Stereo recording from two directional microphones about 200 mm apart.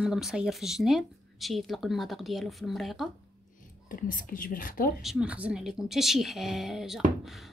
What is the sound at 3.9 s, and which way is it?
Speech, 40° left (ahead or behind).